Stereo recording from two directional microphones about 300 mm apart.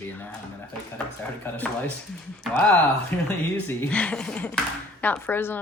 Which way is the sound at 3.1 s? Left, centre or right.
Centre.